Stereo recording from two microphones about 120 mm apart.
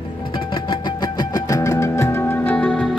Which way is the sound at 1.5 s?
25° left (ahead or behind).